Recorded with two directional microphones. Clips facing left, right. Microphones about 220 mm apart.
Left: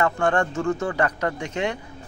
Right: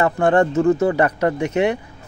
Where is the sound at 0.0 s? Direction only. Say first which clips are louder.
Right 6 dB; 20° right (ahead or behind).